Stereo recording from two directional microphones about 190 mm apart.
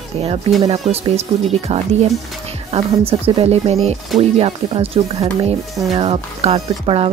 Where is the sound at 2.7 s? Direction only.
35° right (ahead or behind).